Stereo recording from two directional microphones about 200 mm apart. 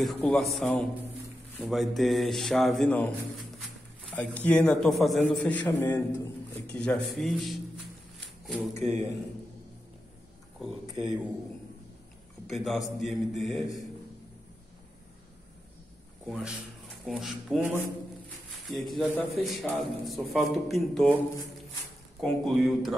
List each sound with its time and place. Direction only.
0.0 s a man's voice: 5° left (ahead or behind)
8.7 s a man's voice: 35° right (ahead or behind)
12.4 s a man's voice: centre (ahead or behind)
16.3 s a man's voice: centre (ahead or behind)
18.7 s a man's voice: centre (ahead or behind)
22.2 s a man's voice: centre (ahead or behind)